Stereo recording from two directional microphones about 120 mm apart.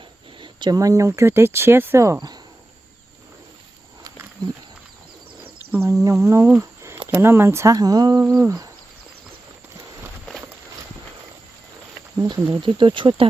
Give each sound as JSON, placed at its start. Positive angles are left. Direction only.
{"t": 0.3, "sound": "speech", "side_deg": -40}
{"t": 5.7, "sound": "speech", "side_deg": -20}
{"t": 6.6, "sound": "a sound", "side_deg": -25}
{"t": 7.1, "sound": "speech", "side_deg": -20}
{"t": 12.2, "sound": "speech", "side_deg": -40}